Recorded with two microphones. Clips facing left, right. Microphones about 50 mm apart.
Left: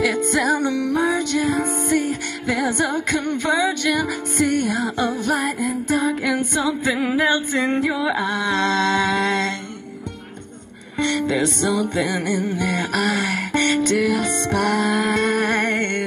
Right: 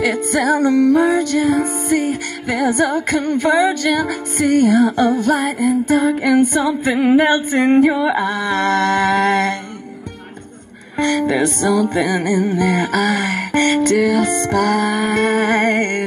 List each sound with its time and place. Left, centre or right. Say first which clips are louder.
0.0 s music: right 2 dB; right
5.9 s singing: right 3 dB; right
11.0 s singing: right 4 dB; right
11.9 s music: right 5 dB; right
13.5 s singing: right 5 dB; right
14.1 s music: right 5 dB; right